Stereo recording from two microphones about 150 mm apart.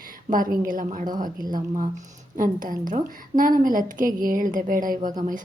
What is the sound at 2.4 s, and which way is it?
A woman's voice, 65° right (ahead or behind).